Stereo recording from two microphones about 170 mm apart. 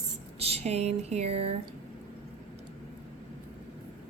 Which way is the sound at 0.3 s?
35° right (ahead or behind).